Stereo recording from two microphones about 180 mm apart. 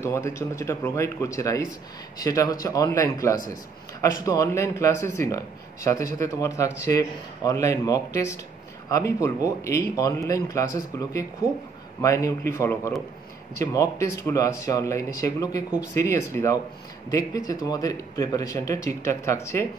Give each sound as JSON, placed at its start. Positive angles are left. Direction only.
{"t": 0.0, "sound": "a man's voice", "side_deg": 15}